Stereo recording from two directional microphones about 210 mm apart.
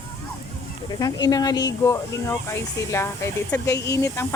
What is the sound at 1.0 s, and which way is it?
Speech, 15° left (ahead or behind).